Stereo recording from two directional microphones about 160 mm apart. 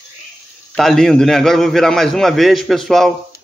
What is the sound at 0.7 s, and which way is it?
Speech, 5° left (ahead or behind).